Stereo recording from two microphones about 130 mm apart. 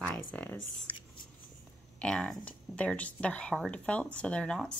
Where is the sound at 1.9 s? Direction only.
5° left (ahead or behind).